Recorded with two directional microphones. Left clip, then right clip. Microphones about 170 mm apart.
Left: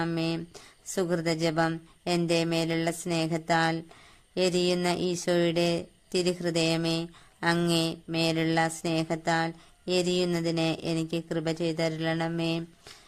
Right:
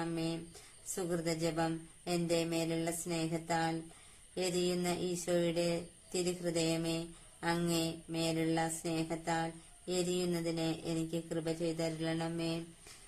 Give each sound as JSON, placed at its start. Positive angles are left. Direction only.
{"t": 0.0, "sound": "speech", "side_deg": 50}